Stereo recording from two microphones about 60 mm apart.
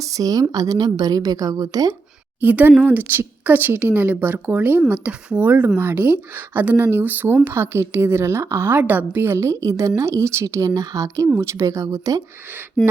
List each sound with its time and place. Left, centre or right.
0.0 s a woman's voice: right
2.4 s a woman's voice: right
5.4 s a woman's voice: right
6.7 s a woman's voice: right
7.0 s a woman's voice: right
7.4 s a woman's voice: right
9.4 s a woman's voice: right
10.4 s speech: right
11.3 s a woman's voice: right
12.8 s a sound: centre